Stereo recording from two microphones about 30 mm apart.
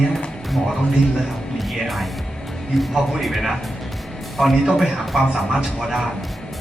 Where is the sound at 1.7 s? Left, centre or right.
Centre.